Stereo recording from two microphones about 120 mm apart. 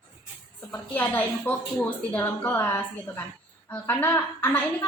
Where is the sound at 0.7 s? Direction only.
15° left (ahead or behind).